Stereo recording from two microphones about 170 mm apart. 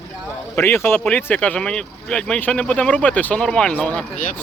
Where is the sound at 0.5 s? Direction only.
10° left (ahead or behind).